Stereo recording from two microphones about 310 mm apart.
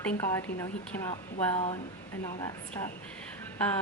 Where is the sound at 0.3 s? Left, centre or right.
Centre.